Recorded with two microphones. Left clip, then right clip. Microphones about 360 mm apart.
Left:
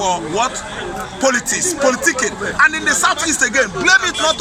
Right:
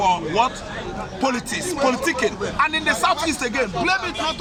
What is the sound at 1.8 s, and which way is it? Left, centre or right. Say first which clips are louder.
Speech: left 4 dB; centre.